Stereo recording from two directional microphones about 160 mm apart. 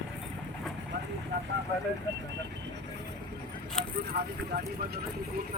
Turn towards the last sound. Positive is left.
turn(degrees=-80)